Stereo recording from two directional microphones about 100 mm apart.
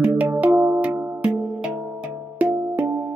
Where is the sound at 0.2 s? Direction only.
15° right (ahead or behind).